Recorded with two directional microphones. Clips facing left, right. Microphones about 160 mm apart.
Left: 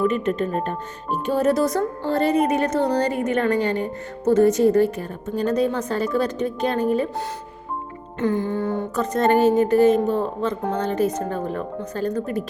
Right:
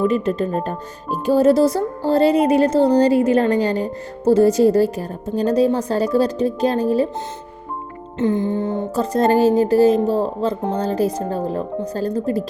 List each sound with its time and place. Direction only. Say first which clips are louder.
0.0 s speech: right 3 dB; 35° right (ahead or behind)
8.2 s music: right 3 dB; 20° right (ahead or behind)
9.0 s speech: right 3 dB; 35° right (ahead or behind)